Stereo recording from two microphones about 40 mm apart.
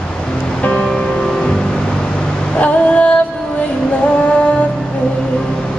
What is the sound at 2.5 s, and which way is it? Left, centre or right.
Female singing, left.